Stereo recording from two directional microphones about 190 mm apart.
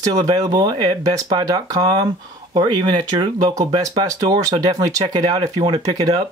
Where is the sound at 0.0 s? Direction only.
20° right (ahead or behind).